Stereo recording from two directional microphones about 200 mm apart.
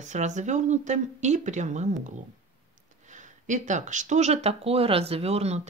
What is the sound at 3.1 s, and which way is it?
Speech, 40° right (ahead or behind).